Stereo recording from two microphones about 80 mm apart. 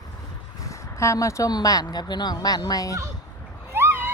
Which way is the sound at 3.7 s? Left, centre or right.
Right.